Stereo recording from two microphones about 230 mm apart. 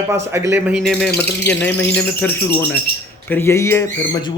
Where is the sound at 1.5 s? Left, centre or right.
Centre.